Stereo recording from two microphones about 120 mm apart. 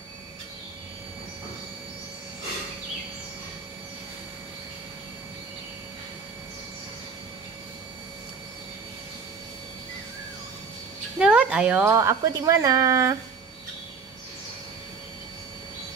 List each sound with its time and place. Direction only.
11.1 s speech: 10° right (ahead or behind)
11.8 s speech: 25° right (ahead or behind)